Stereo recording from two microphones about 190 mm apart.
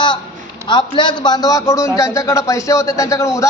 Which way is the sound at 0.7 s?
25° left (ahead or behind).